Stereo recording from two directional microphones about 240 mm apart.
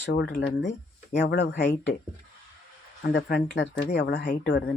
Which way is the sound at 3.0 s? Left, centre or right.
Left.